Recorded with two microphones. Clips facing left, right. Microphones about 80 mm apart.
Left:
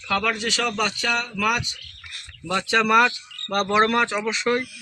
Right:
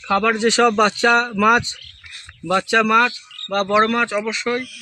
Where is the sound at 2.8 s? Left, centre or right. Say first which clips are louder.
Right 1 dB; centre.